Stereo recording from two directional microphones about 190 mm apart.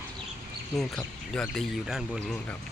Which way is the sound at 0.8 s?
5° left (ahead or behind).